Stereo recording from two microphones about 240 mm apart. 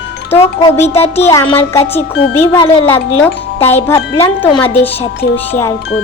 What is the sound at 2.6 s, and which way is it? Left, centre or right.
Speech, left.